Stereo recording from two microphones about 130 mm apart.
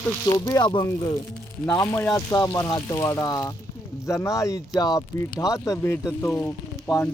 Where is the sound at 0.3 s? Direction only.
30° left (ahead or behind).